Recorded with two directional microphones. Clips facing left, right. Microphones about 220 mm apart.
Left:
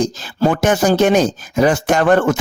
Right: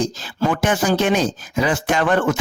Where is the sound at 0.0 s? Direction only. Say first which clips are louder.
Left 4 dB; 45° left (ahead or behind).